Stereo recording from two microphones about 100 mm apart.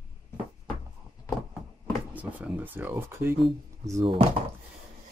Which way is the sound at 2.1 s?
15° right (ahead or behind).